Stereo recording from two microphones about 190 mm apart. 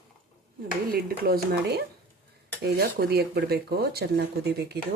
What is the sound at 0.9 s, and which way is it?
Speech, 50° right (ahead or behind).